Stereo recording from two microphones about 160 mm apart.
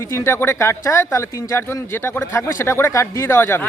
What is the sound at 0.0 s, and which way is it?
Speech, 15° left (ahead or behind).